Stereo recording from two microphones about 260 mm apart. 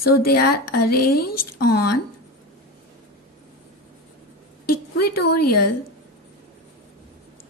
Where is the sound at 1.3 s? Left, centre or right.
Left.